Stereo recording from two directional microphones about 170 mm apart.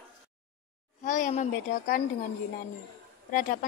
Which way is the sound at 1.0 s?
50° left (ahead or behind).